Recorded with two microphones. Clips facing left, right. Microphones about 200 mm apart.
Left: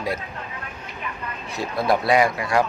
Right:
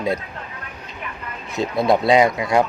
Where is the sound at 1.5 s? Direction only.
20° right (ahead or behind).